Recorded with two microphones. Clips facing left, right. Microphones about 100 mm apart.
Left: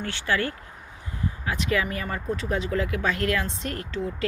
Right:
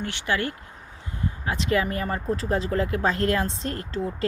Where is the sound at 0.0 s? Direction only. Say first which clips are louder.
Even; 20° right (ahead or behind).